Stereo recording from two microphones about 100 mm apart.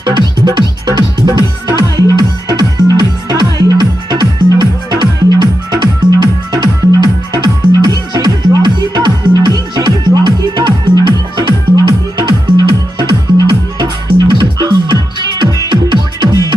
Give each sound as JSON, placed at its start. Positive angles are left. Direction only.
{"t": 0.0, "sound": "music", "side_deg": -45}